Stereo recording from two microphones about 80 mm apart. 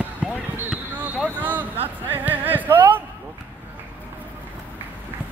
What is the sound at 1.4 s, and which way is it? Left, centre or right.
Speech, right.